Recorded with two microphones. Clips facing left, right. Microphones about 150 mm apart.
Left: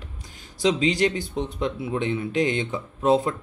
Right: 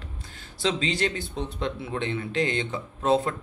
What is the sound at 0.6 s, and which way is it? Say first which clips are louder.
Speech: left 5 dB; 15° left (ahead or behind).